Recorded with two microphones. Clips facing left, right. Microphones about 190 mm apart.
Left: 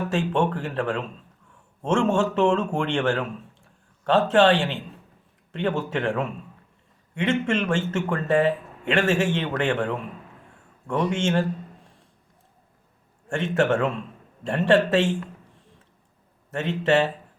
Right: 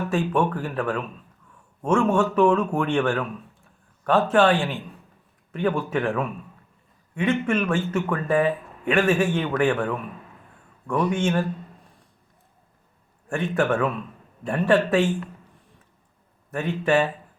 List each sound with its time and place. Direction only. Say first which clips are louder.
0.1 s speech: right 1 dB; 25° left (ahead or behind)
13.3 s speech: left 1 dB; 25° left (ahead or behind)
16.8 s speech: even; 25° left (ahead or behind)